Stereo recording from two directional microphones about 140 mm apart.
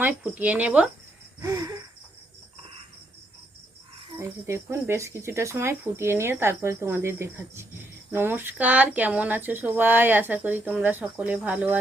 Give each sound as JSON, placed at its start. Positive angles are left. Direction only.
{"t": 0.0, "sound": "speech", "side_deg": -10}
{"t": 1.4, "sound": "speech", "side_deg": -25}
{"t": 4.2, "sound": "speech", "side_deg": -20}